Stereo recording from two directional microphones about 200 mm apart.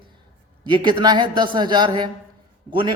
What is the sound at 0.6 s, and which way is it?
A man's voice, 25° right (ahead or behind).